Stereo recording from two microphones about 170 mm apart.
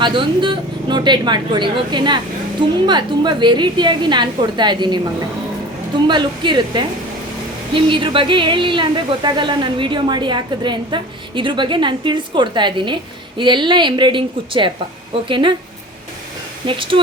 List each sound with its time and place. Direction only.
0.0 s speech: 30° right (ahead or behind)
6.1 s speech: 25° right (ahead or behind)
16.6 s speech: 30° right (ahead or behind)